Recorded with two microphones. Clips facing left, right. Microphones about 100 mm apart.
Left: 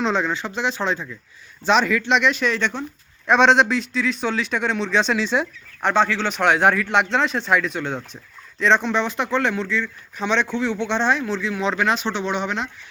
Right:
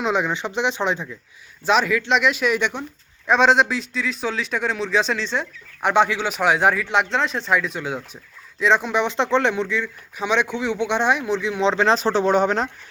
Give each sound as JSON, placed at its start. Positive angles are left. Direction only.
{"t": 0.0, "sound": "speech", "side_deg": -15}
{"t": 1.6, "sound": "speech", "side_deg": -5}
{"t": 5.2, "sound": "speech", "side_deg": 10}
{"t": 5.8, "sound": "speech", "side_deg": -15}
{"t": 9.0, "sound": "speech", "side_deg": -25}